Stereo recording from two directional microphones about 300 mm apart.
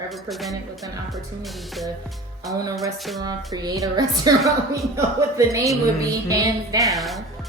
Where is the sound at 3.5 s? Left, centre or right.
Centre.